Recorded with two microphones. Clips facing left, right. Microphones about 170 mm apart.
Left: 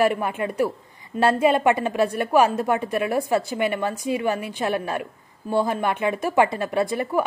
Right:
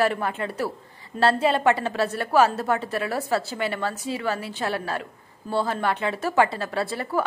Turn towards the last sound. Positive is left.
turn(degrees=15)  # may be behind; listen again after turning